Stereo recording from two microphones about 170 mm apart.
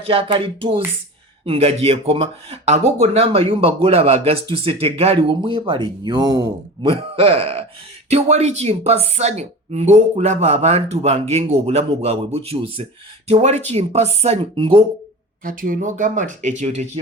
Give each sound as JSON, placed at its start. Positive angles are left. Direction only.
{"t": 0.0, "sound": "a woman's voice", "side_deg": -35}
{"t": 6.9, "sound": "a woman's voice", "side_deg": -35}
{"t": 15.4, "sound": "speech", "side_deg": -55}